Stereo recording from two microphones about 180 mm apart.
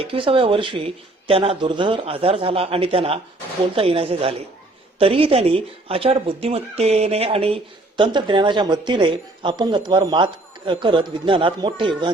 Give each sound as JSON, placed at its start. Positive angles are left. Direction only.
{"t": 0.0, "sound": "speech", "side_deg": -30}